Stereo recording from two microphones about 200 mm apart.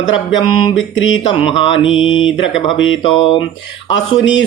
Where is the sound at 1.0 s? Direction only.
80° left.